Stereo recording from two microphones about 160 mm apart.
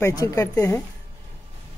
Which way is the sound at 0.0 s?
20° left (ahead or behind).